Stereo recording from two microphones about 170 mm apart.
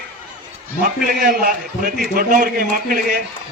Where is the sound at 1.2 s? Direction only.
55° right (ahead or behind).